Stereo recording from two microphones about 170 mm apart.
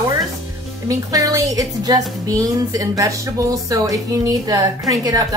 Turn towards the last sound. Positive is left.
turn(degrees=-20)  # may be behind; listen again after turning